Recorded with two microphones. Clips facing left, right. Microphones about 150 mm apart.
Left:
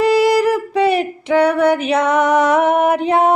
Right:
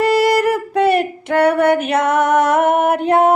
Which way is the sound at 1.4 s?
55° right (ahead or behind).